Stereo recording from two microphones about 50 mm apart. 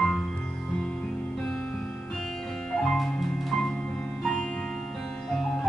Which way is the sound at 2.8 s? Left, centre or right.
Centre.